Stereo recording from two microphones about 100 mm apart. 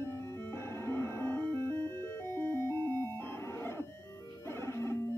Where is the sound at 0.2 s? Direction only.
25° left (ahead or behind).